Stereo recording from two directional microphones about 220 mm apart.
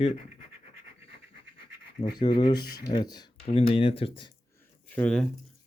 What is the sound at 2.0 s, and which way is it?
Speech, 20° left (ahead or behind).